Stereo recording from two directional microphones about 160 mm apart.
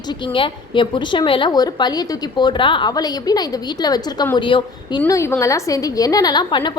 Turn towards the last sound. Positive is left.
turn(degrees=25)  # may be behind; listen again after turning